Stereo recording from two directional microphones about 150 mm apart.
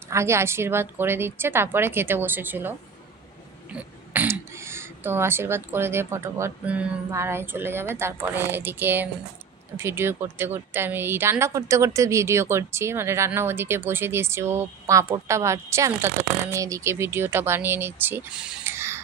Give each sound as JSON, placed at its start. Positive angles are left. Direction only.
{"t": 0.1, "sound": "speech", "side_deg": -20}
{"t": 3.7, "sound": "speech", "side_deg": -10}